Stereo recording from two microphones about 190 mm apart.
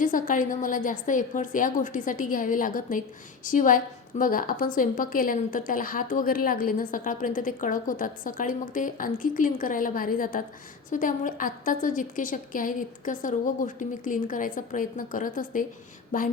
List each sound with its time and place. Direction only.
0.0 s a woman's voice: 45° left (ahead or behind)